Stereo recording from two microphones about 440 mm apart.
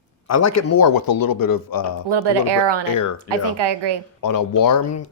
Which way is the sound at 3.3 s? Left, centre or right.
Right.